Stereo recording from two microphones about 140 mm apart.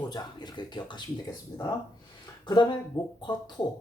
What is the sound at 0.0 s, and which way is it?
Speech, 30° left (ahead or behind).